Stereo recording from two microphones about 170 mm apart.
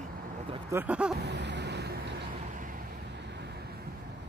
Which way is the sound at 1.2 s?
90° right.